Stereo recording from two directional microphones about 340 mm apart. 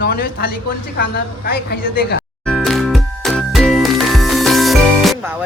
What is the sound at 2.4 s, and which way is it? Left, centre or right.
Music, centre.